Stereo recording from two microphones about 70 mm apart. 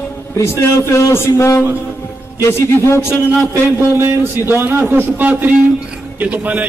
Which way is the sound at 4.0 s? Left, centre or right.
Right.